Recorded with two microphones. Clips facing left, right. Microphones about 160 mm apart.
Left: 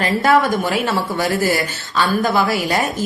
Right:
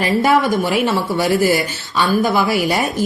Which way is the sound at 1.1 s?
15° right (ahead or behind).